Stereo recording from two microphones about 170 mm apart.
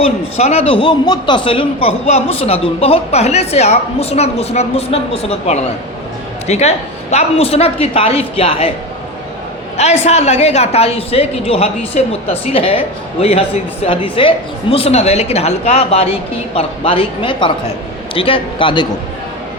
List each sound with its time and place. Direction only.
0.0 s a woman's voice: 35° left (ahead or behind)
9.7 s a woman's voice: 40° left (ahead or behind)